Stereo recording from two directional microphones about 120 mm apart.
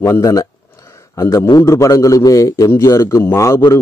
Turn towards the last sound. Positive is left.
turn(degrees=20)  # may be behind; listen again after turning